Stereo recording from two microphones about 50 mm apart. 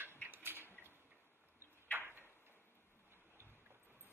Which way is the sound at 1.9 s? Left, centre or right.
Right.